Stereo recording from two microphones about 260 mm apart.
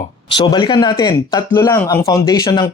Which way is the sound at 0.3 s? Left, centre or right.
Centre.